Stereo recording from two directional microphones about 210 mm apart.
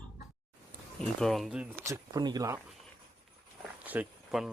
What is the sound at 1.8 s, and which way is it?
Speech, 15° right (ahead or behind).